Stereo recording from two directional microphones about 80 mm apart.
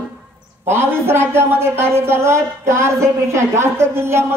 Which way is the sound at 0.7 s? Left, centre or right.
Right.